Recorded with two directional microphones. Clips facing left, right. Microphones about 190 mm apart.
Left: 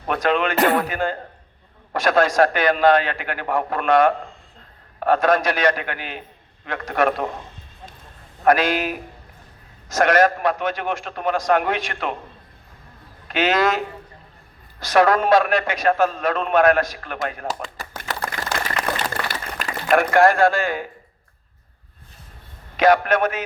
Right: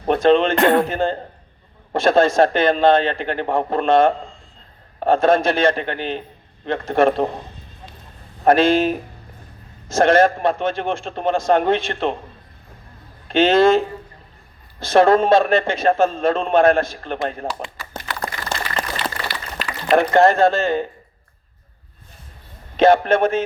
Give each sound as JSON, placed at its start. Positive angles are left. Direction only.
{"t": 0.1, "sound": "speech", "side_deg": -25}
{"t": 0.5, "sound": "speech", "side_deg": 5}
{"t": 0.8, "sound": "a man's voice", "side_deg": -25}
{"t": 8.4, "sound": "a man's voice", "side_deg": -25}
{"t": 13.2, "sound": "a man's voice", "side_deg": -25}
{"t": 18.4, "sound": "a sound", "side_deg": 55}
{"t": 19.9, "sound": "a man's voice", "side_deg": -25}
{"t": 22.8, "sound": "a man's voice", "side_deg": -25}